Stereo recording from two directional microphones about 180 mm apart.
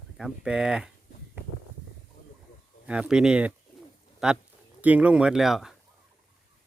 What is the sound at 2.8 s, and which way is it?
Speech, 5° right (ahead or behind).